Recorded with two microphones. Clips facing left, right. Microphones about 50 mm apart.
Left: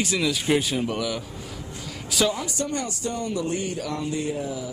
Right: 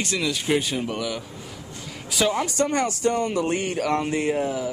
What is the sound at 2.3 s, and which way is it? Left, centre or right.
Speech, right.